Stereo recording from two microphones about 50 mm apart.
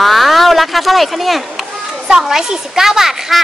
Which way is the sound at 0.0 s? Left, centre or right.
Centre.